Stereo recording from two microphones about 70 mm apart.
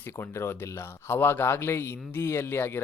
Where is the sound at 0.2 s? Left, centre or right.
Left.